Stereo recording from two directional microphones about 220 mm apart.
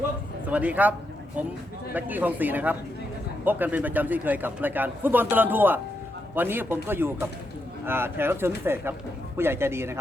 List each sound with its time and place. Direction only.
0.5 s a man's voice: 5° right (ahead or behind)